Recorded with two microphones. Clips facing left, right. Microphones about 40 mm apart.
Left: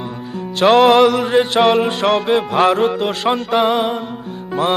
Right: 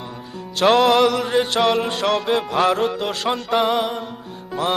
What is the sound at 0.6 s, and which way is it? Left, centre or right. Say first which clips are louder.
Music: left 4 dB; centre.